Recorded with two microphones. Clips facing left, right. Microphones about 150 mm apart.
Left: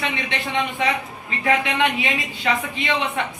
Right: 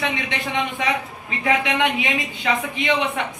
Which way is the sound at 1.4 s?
15° right (ahead or behind).